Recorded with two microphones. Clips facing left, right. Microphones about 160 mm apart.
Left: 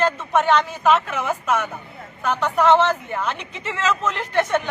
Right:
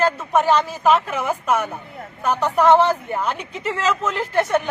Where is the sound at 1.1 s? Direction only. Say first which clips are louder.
Right 1 dB; 10° right (ahead or behind).